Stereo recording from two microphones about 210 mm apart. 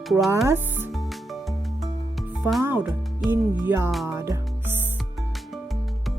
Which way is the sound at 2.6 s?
10° right (ahead or behind).